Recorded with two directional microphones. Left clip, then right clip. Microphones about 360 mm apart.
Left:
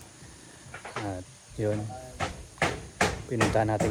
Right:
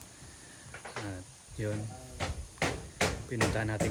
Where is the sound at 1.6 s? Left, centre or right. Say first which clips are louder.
Left 8 dB; centre.